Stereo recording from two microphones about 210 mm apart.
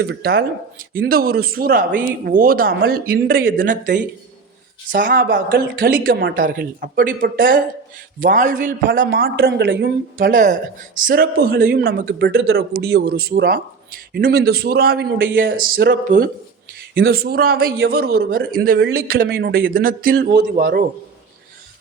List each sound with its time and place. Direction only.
0.0 s speech: 50° right (ahead or behind)
4.9 s speech: 45° right (ahead or behind)
10.2 s speech: 40° right (ahead or behind)
16.0 s speech: 35° right (ahead or behind)